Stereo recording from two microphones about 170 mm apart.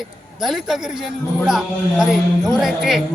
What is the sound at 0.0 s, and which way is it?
A man's voice, centre (ahead or behind).